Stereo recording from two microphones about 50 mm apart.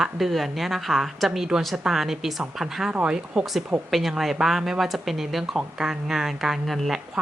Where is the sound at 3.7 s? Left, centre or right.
Right.